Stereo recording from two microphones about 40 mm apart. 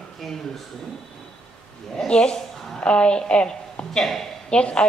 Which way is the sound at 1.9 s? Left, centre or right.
Left.